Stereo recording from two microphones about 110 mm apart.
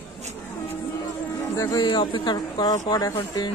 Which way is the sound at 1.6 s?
35° left (ahead or behind).